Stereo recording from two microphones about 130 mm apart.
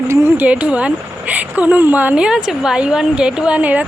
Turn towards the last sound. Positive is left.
turn(degrees=-10)  # may be behind; listen again after turning